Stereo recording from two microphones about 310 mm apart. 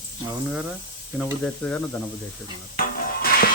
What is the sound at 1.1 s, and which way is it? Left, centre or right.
Speech, centre.